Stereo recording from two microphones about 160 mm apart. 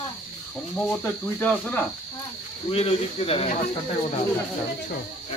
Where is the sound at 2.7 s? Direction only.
40° left (ahead or behind).